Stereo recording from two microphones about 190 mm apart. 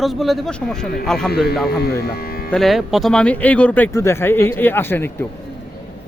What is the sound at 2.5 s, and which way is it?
Speech, centre (ahead or behind).